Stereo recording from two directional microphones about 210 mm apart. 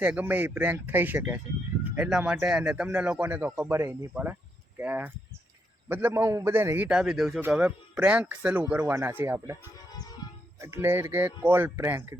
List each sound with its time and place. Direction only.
0.0 s a man's voice: 10° right (ahead or behind)
9.9 s music: 20° left (ahead or behind)
10.6 s a man's voice: 10° right (ahead or behind)